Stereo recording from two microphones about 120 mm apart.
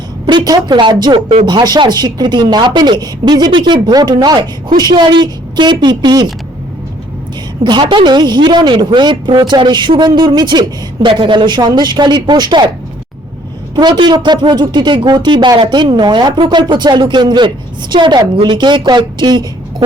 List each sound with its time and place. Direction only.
0.3 s speech: 35° right (ahead or behind)
7.6 s speech: 40° right (ahead or behind)
13.7 s speech: 40° right (ahead or behind)